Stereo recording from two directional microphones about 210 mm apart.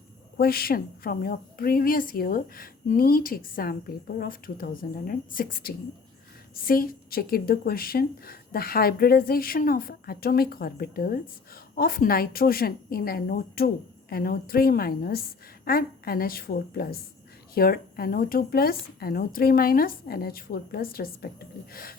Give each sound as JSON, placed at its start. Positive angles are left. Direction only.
{"t": 0.3, "sound": "a woman's voice", "side_deg": 45}